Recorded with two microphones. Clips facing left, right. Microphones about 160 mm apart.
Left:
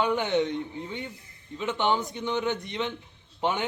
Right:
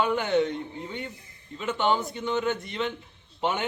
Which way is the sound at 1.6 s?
15° left (ahead or behind).